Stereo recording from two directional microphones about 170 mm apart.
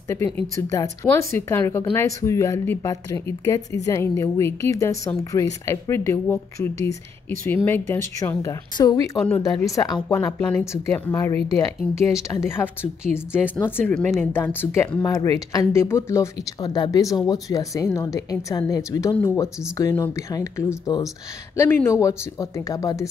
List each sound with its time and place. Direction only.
0.1 s speech: 15° left (ahead or behind)
10.0 s speech: 10° left (ahead or behind)